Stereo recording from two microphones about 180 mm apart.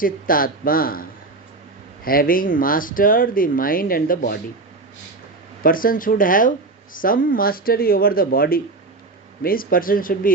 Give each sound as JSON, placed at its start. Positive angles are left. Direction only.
{"t": 0.0, "sound": "speech", "side_deg": 50}
{"t": 2.0, "sound": "speech", "side_deg": 55}
{"t": 5.6, "sound": "speech", "side_deg": 50}